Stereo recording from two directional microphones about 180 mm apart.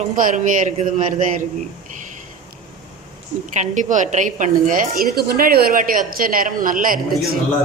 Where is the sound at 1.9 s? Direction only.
45° right (ahead or behind).